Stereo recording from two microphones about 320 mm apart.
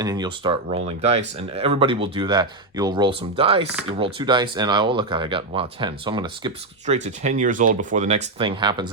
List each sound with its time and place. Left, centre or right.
0.0 s speech: centre